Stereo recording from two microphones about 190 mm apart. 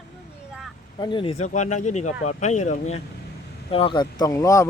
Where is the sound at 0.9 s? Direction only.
25° left (ahead or behind).